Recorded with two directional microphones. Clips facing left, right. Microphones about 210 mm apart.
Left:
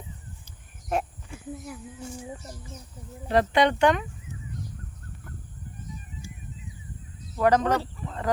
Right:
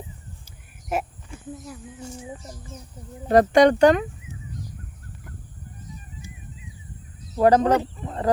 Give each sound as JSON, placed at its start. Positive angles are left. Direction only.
{"t": 0.9, "sound": "speech", "side_deg": -5}
{"t": 3.2, "sound": "speech", "side_deg": -45}
{"t": 7.3, "sound": "speech", "side_deg": -35}
{"t": 7.7, "sound": "speech", "side_deg": -20}
{"t": 8.0, "sound": "wild animals", "side_deg": -30}